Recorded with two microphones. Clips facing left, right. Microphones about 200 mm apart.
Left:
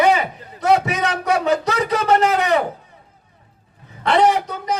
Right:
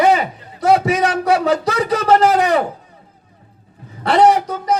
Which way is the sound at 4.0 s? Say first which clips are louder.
Right 3 dB; 35° right (ahead or behind).